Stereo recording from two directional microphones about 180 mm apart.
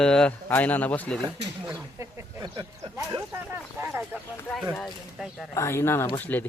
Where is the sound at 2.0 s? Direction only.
20° right (ahead or behind).